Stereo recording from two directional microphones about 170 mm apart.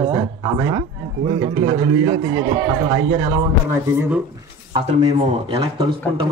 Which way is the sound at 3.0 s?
20° right (ahead or behind).